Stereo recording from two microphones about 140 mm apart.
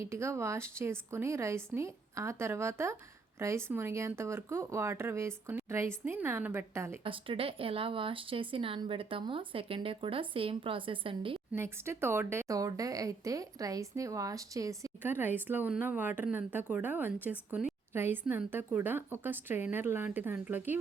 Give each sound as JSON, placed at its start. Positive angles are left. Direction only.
{"t": 0.0, "sound": "a woman's voice", "side_deg": -20}
{"t": 7.0, "sound": "speech", "side_deg": -40}
{"t": 11.5, "sound": "a woman's voice", "side_deg": -20}